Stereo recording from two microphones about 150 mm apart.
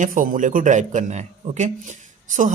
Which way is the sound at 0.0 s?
65° right (ahead or behind).